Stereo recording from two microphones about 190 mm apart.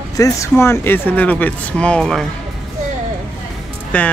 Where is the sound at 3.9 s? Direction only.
5° left (ahead or behind).